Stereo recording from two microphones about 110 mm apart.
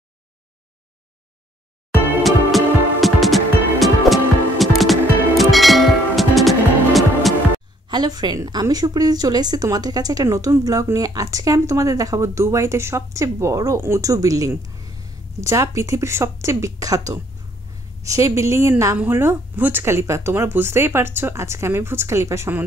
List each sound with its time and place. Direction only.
2.2 s music: centre (ahead or behind)
7.9 s a woman's voice: 40° right (ahead or behind); by 22.7 s 20° right (ahead or behind)